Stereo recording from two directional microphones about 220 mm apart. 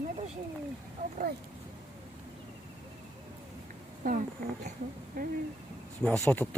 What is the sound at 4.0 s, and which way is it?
Insect, 40° right (ahead or behind).